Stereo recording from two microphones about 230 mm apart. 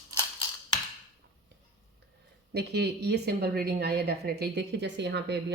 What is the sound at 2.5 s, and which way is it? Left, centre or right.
Speech, right.